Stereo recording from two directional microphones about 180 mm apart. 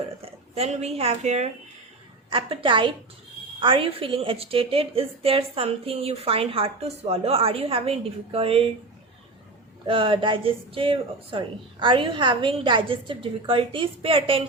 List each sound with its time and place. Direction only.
0.2 s a woman's voice: 35° right (ahead or behind)
9.8 s a woman's voice: 30° right (ahead or behind)